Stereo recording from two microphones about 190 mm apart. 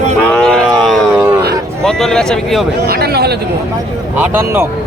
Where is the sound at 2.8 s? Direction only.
55° right (ahead or behind).